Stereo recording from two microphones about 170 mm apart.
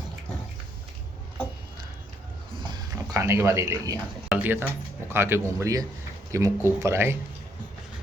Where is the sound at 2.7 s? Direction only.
20° right (ahead or behind).